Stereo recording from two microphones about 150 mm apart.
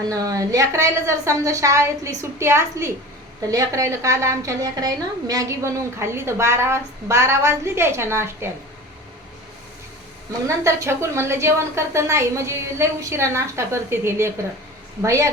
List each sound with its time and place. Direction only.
0.1 s a woman's voice: 25° right (ahead or behind)
10.4 s a woman's voice: 20° right (ahead or behind)